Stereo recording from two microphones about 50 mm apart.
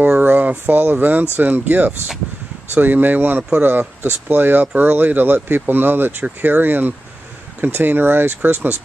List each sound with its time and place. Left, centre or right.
0.2 s speech: right